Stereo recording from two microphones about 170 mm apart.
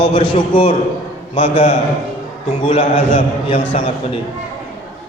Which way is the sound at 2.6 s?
30° left (ahead or behind).